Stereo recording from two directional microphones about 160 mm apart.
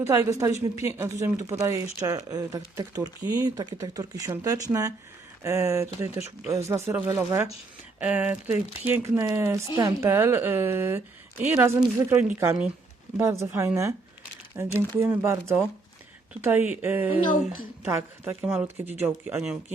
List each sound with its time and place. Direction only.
0.0 s a woman's voice: 20° right (ahead or behind)
13.1 s a woman's voice: 20° right (ahead or behind)